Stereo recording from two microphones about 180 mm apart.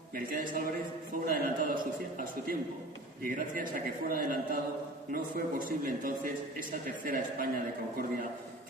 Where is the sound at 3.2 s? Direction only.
50° right (ahead or behind).